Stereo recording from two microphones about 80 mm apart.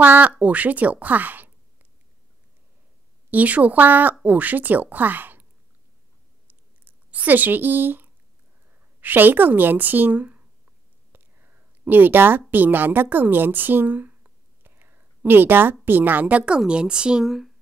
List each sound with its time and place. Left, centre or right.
0.0 s speech: right
3.3 s speech: centre
6.4 s a sound: right
9.0 s speech: right; by 17.5 s centre